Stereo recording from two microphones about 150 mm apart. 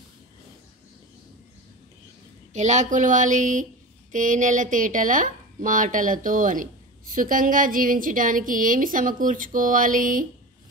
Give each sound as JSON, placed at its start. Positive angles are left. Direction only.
{"t": 2.5, "sound": "speech", "side_deg": -50}